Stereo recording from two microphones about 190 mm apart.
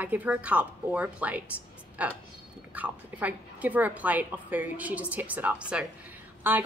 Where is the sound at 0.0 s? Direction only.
10° right (ahead or behind).